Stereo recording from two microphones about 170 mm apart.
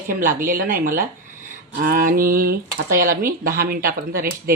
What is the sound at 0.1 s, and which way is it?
Speech, 50° right (ahead or behind).